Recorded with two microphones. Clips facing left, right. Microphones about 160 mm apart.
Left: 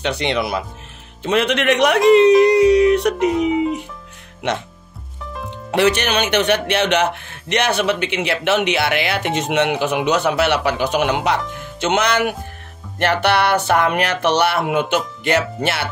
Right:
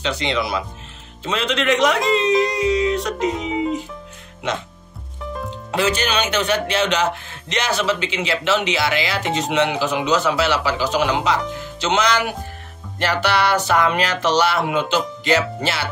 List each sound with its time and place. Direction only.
0.0 s speech: 60° left (ahead or behind)
3.3 s speech: 10° left (ahead or behind)
5.7 s speech: 65° left (ahead or behind)